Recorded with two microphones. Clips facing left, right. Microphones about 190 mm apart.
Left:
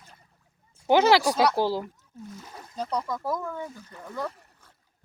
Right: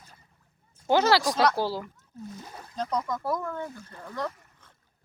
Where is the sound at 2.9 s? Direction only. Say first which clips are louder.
Even; 5° left (ahead or behind).